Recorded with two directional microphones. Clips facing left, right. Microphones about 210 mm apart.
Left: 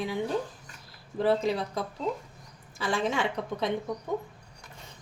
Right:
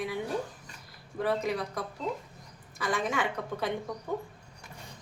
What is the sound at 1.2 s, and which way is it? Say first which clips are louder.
A woman's voice: left 4 dB; 30° left (ahead or behind).